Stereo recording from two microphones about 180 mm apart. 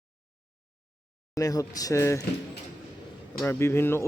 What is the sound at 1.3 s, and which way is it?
Speech, 20° left (ahead or behind).